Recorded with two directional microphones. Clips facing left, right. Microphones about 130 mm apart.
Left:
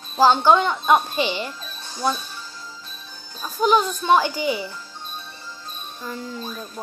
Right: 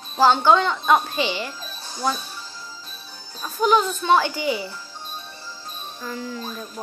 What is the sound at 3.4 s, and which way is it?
A child's voice, 15° left (ahead or behind).